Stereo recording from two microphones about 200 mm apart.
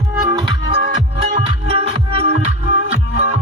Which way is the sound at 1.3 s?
30° right (ahead or behind).